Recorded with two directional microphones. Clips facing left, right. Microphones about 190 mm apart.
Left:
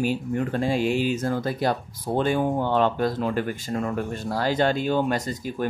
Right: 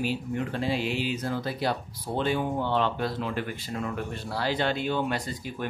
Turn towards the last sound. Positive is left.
turn(degrees=45)  # may be behind; listen again after turning